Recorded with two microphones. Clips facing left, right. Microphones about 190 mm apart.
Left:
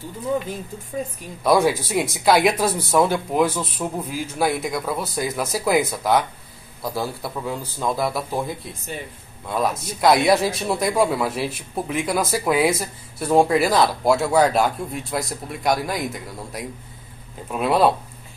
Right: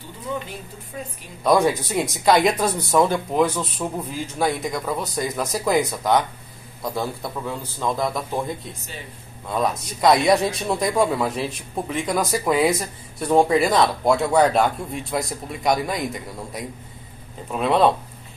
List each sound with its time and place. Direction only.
1.4 s a man's voice: 5° left (ahead or behind)